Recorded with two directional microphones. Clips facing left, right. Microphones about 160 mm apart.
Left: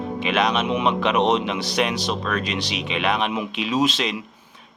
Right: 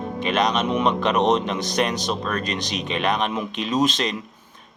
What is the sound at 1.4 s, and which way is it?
Speech, 45° right (ahead or behind).